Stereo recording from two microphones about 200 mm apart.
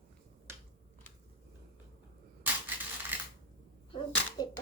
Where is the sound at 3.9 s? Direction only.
20° left (ahead or behind).